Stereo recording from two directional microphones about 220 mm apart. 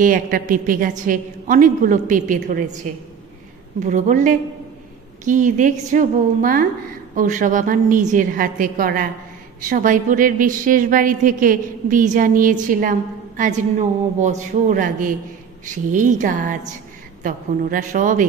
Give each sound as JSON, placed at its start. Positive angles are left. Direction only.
{"t": 0.0, "sound": "a woman's voice", "side_deg": -40}
{"t": 3.8, "sound": "a woman's voice", "side_deg": -35}